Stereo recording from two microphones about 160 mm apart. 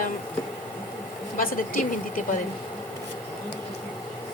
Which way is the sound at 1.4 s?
65° left (ahead or behind).